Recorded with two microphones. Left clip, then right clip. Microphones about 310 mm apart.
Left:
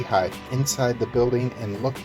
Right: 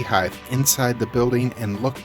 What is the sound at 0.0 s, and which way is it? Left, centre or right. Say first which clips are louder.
Speech: right 1 dB; right.